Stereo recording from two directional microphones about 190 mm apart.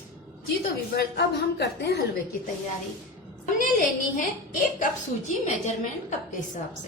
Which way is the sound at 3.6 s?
45° left (ahead or behind).